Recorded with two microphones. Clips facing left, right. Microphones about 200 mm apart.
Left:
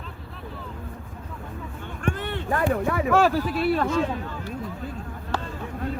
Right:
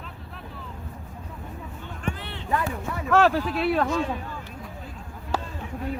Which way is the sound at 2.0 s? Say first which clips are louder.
Left 3 dB; 50° left (ahead or behind).